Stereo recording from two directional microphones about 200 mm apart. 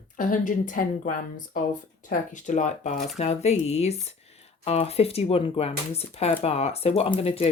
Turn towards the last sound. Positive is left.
turn(degrees=30)  # may be behind; listen again after turning